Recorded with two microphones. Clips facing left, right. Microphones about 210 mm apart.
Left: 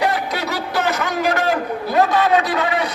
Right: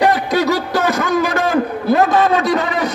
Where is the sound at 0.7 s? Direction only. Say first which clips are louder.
Right 2 dB; 45° right (ahead or behind).